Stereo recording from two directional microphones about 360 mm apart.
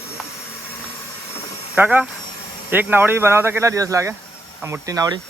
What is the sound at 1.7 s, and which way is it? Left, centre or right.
Speech, centre.